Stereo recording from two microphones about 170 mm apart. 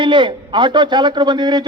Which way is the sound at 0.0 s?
30° right (ahead or behind).